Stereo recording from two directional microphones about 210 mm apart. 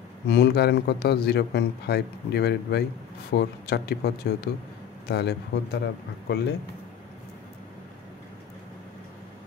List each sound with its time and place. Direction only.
0.3 s a man's voice: 50° left (ahead or behind)